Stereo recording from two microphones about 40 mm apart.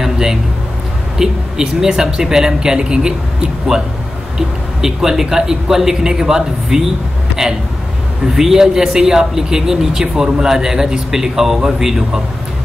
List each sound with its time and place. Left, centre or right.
0.0 s a sound: centre
1.1 s speech: centre
4.4 s speech: centre
8.4 s speech: centre